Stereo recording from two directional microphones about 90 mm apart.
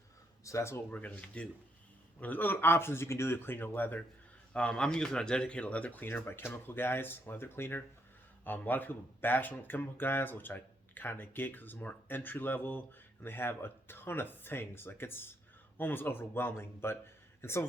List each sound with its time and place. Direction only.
0.4 s speech: 30° left (ahead or behind)
0.9 s speech: 15° left (ahead or behind)
4.5 s speech: 10° left (ahead or behind); by 17.7 s 30° left (ahead or behind)